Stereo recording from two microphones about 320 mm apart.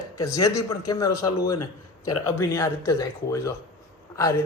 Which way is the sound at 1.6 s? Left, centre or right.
Left.